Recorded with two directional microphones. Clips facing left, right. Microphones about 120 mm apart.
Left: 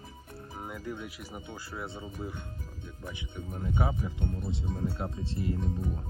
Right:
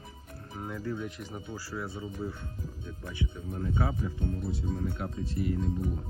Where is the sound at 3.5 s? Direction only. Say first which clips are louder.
Left 1 dB; 15° left (ahead or behind).